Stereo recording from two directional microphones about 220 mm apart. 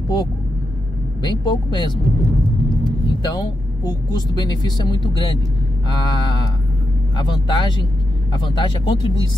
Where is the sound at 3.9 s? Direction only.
20° left (ahead or behind).